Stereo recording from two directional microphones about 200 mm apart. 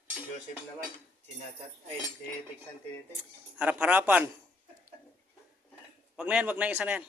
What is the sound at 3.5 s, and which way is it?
Speech, 5° right (ahead or behind).